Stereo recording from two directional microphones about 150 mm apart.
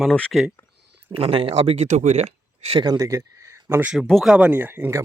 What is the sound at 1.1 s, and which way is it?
Speech, 35° right (ahead or behind).